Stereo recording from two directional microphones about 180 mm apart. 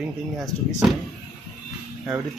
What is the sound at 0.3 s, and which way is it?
Speech, centre (ahead or behind).